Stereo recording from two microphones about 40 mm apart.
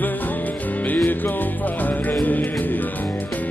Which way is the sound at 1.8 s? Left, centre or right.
Left.